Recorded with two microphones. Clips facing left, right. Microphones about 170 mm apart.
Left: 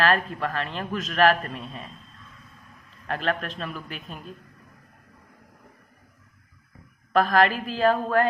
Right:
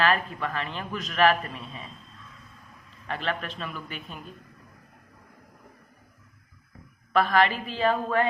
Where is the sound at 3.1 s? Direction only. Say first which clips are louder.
Left 3 dB; 40° left (ahead or behind).